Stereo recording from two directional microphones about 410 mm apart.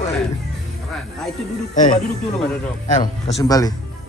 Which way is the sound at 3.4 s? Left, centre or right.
Centre.